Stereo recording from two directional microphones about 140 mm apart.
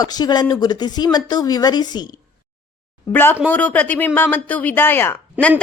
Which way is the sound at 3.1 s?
15° left (ahead or behind).